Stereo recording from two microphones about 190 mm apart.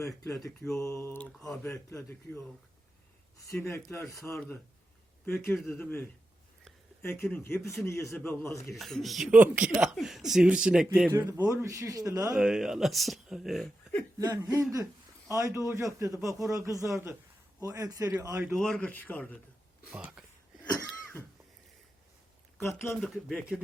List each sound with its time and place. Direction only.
0.0 s speech: 15° left (ahead or behind)
1.3 s speech: centre (ahead or behind)
1.7 s speech: 15° left (ahead or behind)
3.6 s speech: 15° left (ahead or behind)
8.7 s speech: centre (ahead or behind)
11.1 s a man's voice: 15° right (ahead or behind)
12.4 s speech: 5° right (ahead or behind)
14.2 s a man's voice: 20° right (ahead or behind)
18.5 s speech: centre (ahead or behind)
19.9 s speech: 5° right (ahead or behind)
20.8 s cough: 10° left (ahead or behind)
22.5 s speech: 15° left (ahead or behind)
23.0 s speech: centre (ahead or behind)